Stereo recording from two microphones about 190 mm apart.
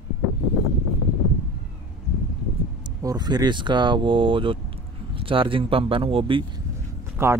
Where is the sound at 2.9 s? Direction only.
20° right (ahead or behind).